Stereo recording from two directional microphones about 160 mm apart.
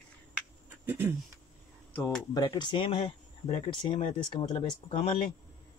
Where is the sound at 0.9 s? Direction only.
15° right (ahead or behind).